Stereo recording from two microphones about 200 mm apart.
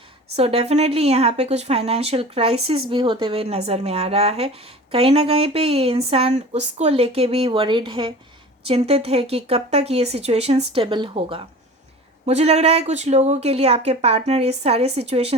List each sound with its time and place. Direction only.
0.3 s speech: 30° right (ahead or behind)